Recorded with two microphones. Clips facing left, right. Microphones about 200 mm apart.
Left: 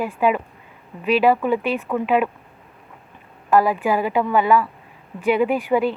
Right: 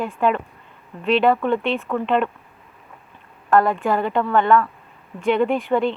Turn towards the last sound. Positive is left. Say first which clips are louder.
# even
turn(degrees=5)  # may be behind; listen again after turning